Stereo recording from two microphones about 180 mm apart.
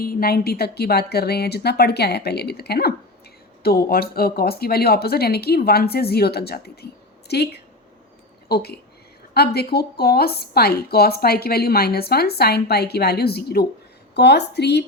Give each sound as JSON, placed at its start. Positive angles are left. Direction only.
{"t": 0.0, "sound": "a woman's voice", "side_deg": 55}
{"t": 8.4, "sound": "a woman's voice", "side_deg": 60}